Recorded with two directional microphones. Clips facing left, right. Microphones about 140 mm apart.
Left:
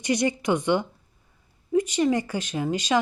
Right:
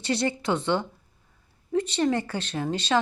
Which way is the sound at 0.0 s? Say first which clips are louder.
Left 2 dB; 15° left (ahead or behind).